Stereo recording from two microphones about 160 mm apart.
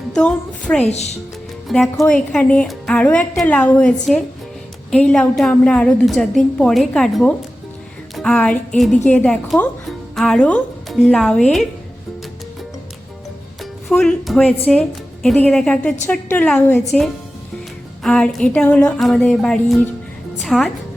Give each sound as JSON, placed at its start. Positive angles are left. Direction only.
{"t": 0.1, "sound": "a woman's voice", "side_deg": 5}
{"t": 0.9, "sound": "speech", "side_deg": 45}
{"t": 1.6, "sound": "a woman's voice", "side_deg": 0}
{"t": 8.1, "sound": "music", "side_deg": 5}
{"t": 9.0, "sound": "a woman's voice", "side_deg": 5}
{"t": 13.6, "sound": "a woman's voice", "side_deg": 0}
{"t": 18.0, "sound": "a woman's voice", "side_deg": 5}